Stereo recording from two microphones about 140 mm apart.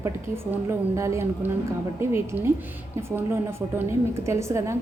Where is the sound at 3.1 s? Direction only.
15° right (ahead or behind).